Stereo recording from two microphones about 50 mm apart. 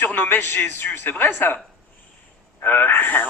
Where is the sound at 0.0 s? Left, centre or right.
Left.